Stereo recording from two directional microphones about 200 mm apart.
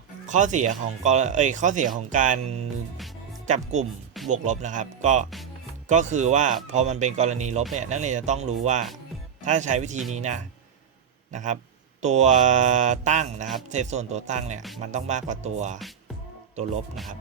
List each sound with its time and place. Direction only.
0.3 s speech: 40° right (ahead or behind)